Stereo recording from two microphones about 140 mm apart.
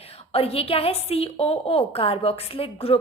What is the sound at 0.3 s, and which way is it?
A woman's voice, 45° left (ahead or behind).